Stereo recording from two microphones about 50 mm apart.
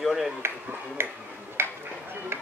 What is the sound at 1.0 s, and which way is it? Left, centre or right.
Speech, right.